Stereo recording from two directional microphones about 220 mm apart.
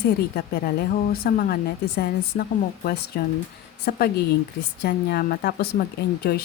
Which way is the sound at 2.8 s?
45° left (ahead or behind).